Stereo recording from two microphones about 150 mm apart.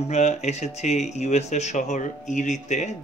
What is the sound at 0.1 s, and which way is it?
Speech, 50° left (ahead or behind).